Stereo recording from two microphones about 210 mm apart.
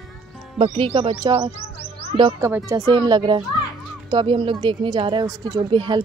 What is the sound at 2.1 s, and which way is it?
Speech, 25° right (ahead or behind).